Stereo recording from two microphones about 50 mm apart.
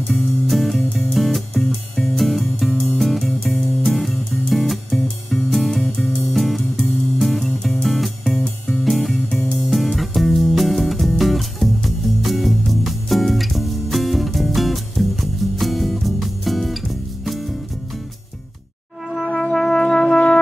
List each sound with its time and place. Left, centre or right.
0.1 s music: centre
19.2 s brass instrument: centre